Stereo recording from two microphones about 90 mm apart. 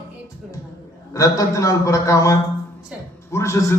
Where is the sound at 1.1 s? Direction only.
35° left (ahead or behind).